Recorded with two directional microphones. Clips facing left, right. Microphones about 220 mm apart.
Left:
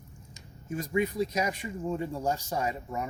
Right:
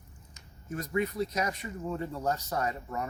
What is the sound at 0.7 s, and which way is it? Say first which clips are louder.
Speech: left 2 dB; 15° left (ahead or behind).